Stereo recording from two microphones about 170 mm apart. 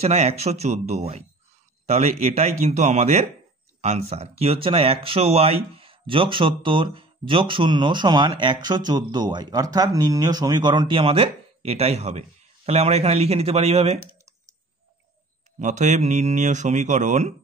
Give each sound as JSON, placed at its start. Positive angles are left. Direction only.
{"t": 0.0, "sound": "speech", "side_deg": -40}
{"t": 15.6, "sound": "speech", "side_deg": -45}